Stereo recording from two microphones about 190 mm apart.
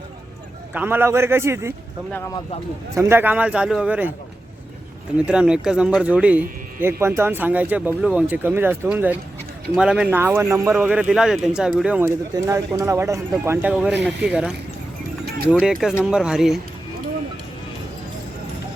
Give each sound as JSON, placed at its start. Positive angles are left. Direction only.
{"t": 0.7, "sound": "speech", "side_deg": -10}
{"t": 2.1, "sound": "speech", "side_deg": 15}
{"t": 2.9, "sound": "speech", "side_deg": -15}
{"t": 5.1, "sound": "speech", "side_deg": -5}
{"t": 15.5, "sound": "speech", "side_deg": -5}